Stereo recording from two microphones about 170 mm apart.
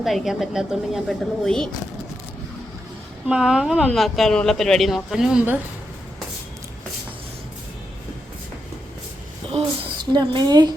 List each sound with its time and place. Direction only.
0.0 s speech: centre (ahead or behind)
3.2 s speech: 5° right (ahead or behind)
10.1 s a woman's voice: 25° right (ahead or behind)